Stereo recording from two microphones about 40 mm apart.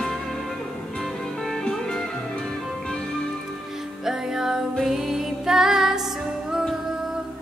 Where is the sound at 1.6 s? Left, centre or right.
Centre.